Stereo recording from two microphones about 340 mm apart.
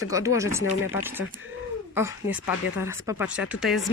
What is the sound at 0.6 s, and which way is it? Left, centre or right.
Speech, left.